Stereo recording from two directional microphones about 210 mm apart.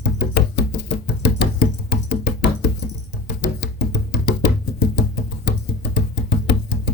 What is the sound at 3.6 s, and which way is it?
Music, 55° left (ahead or behind).